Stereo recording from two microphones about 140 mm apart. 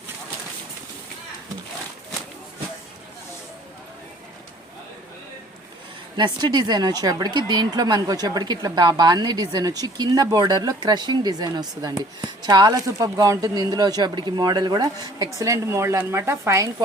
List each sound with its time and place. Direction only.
6.1 s speech: 30° right (ahead or behind)